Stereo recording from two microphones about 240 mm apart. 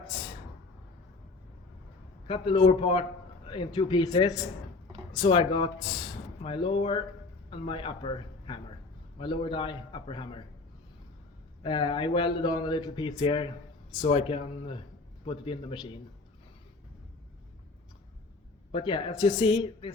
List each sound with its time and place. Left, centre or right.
2.2 s a man's voice: left
11.6 s speech: centre
18.7 s speech: centre